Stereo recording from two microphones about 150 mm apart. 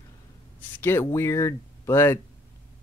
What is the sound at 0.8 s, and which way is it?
Speech, 15° left (ahead or behind).